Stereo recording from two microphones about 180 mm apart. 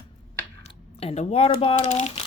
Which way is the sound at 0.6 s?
35° left (ahead or behind).